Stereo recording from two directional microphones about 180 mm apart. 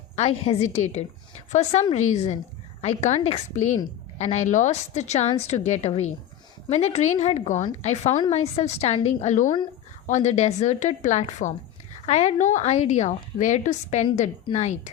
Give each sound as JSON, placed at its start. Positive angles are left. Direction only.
{"t": 0.2, "sound": "a woman's voice", "side_deg": 35}